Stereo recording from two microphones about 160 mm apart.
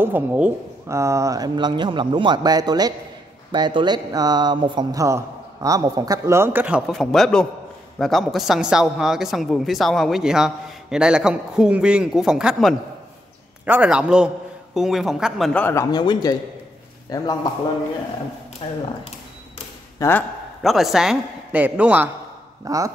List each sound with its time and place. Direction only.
0.0 s a man's voice: 10° right (ahead or behind)
6.9 s a woman's voice: centre (ahead or behind)
15.6 s speech: 15° left (ahead or behind)
18.6 s speech: 35° left (ahead or behind)
20.0 s a man's voice: 15° left (ahead or behind)
20.6 s a man's voice: centre (ahead or behind)
22.7 s a man's voice: 20° right (ahead or behind)